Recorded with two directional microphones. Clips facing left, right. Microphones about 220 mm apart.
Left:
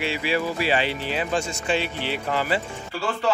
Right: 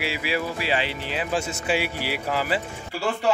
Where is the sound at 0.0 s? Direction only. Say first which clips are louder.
Left 2 dB; 5° right (ahead or behind).